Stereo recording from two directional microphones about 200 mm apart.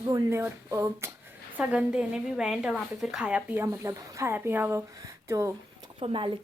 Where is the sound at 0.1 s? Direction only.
15° right (ahead or behind).